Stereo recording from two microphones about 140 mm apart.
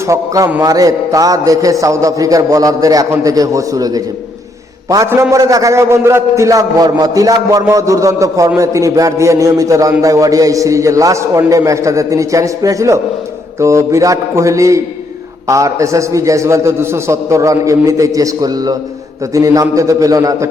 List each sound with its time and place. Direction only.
0.1 s a man's voice: 25° right (ahead or behind)